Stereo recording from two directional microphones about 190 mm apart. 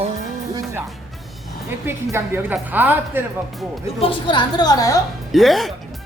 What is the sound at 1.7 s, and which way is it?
A woman's voice, 10° right (ahead or behind).